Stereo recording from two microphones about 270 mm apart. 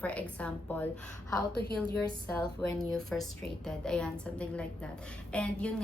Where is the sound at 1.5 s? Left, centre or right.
Left.